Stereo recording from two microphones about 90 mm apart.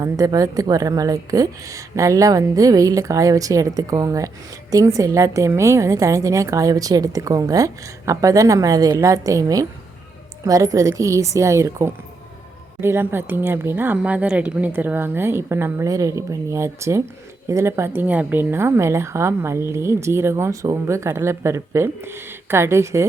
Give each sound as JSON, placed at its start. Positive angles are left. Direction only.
{"t": 0.0, "sound": "a woman's voice", "side_deg": -40}